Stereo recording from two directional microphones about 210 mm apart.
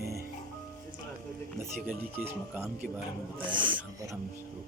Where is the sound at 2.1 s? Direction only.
10° right (ahead or behind).